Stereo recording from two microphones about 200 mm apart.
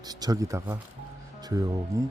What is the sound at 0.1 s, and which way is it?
Speech, 20° right (ahead or behind).